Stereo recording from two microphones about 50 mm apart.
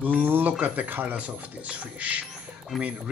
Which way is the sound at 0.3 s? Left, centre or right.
Right.